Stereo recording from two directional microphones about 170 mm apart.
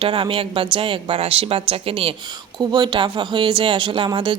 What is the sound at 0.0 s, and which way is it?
Speech, 30° right (ahead or behind).